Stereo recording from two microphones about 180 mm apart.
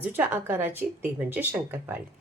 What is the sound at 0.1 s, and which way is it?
Speech, 10° right (ahead or behind).